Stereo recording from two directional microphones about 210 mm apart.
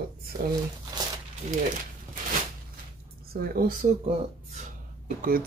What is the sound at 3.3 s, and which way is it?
Speech, 45° right (ahead or behind).